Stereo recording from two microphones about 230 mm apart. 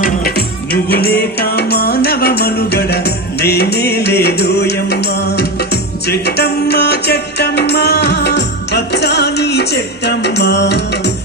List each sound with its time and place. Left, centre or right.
0.0 s music: left